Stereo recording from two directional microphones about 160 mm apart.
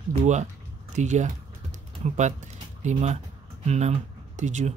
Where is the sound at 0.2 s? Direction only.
45° right (ahead or behind).